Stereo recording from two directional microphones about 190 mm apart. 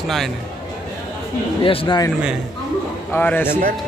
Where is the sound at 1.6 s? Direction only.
25° left (ahead or behind).